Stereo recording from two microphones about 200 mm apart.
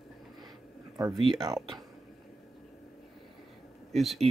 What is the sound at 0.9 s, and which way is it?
Speech, 20° right (ahead or behind).